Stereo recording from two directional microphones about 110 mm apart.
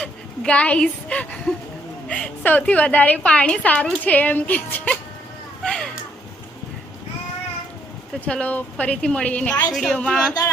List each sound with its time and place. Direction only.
0.0 s a woman's voice: 10° left (ahead or behind)
5.6 s a sound: 5° left (ahead or behind)
8.2 s a woman's voice: 15° left (ahead or behind)